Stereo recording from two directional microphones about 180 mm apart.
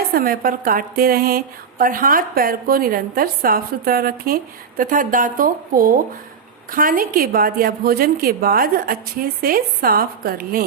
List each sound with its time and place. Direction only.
0.1 s a woman's voice: 55° right (ahead or behind)